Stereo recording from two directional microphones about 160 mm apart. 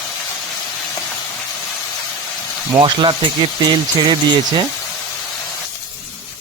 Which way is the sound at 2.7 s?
30° right (ahead or behind).